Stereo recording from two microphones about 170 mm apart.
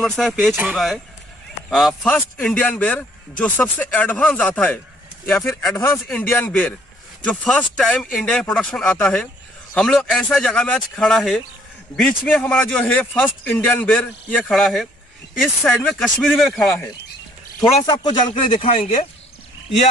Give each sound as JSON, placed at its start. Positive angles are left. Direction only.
{"t": 0.0, "sound": "speech", "side_deg": 5}
{"t": 5.8, "sound": "speech", "side_deg": 10}
{"t": 17.6, "sound": "speech", "side_deg": 25}